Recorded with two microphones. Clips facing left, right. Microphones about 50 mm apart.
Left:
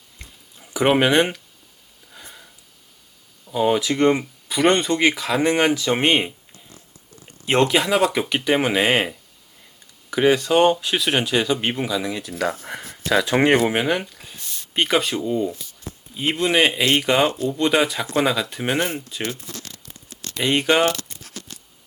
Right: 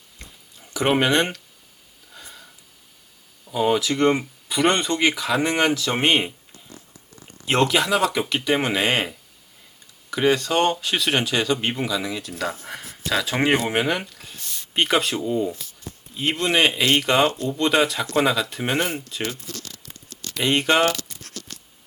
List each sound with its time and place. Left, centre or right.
0.2 s a sound: centre
3.4 s speech: centre
3.8 s speech: centre
4.0 s speech: centre
7.4 s speech: centre
19.2 s speech: left
20.4 s speech: centre